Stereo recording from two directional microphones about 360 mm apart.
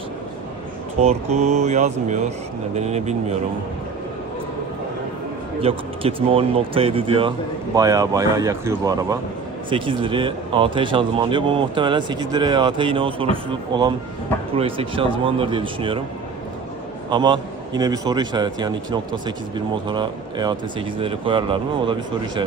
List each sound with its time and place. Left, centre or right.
0.9 s speech: centre
5.5 s speech: centre
17.1 s speech: centre